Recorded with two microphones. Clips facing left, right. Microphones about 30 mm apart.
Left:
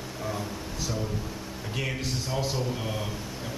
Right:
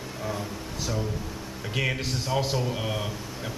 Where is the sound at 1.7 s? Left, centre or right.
Centre.